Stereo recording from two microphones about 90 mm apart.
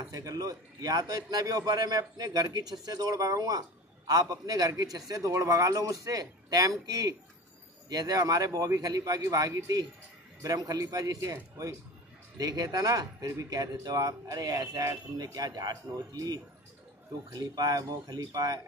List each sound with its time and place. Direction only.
0.1 s speech: 40° right (ahead or behind)
12.4 s speech: 45° right (ahead or behind)